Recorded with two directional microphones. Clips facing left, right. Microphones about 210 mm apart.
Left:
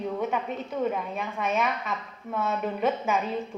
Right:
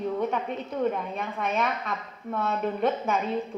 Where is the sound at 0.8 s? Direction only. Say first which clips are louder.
Right 1 dB; 5° left (ahead or behind).